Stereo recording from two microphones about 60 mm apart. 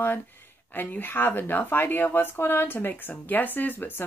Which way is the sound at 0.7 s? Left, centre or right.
Left.